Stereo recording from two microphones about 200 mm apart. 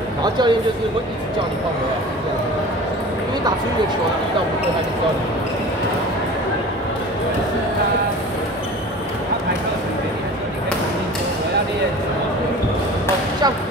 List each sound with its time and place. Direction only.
0.2 s a man's voice: 20° right (ahead or behind)